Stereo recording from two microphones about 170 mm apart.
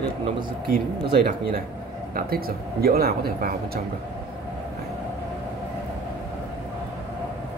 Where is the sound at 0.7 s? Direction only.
55° right (ahead or behind).